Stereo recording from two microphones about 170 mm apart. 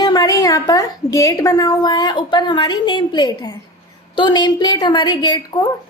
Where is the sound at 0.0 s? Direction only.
25° left (ahead or behind).